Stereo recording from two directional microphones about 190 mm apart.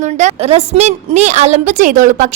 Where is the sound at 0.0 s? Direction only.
40° right (ahead or behind).